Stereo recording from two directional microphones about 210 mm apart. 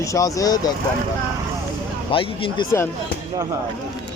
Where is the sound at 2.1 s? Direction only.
25° left (ahead or behind).